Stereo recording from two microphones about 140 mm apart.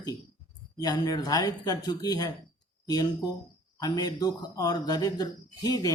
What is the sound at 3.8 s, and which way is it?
Speech, 25° left (ahead or behind).